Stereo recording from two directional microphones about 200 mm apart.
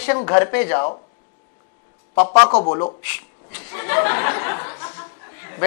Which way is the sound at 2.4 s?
30° left (ahead or behind).